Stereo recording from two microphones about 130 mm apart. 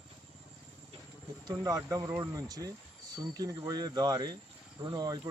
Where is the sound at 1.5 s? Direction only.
30° right (ahead or behind).